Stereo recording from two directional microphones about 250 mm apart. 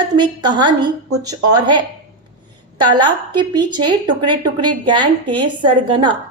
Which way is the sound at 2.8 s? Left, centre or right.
Centre.